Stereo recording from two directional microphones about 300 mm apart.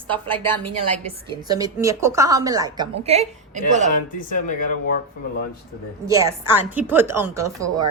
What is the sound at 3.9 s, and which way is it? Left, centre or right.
Speech, left.